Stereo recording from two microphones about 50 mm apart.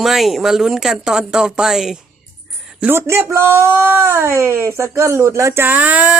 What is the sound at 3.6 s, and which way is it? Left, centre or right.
Speech, right.